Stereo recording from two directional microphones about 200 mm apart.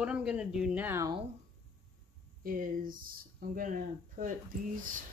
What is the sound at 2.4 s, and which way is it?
Speech, 45° right (ahead or behind).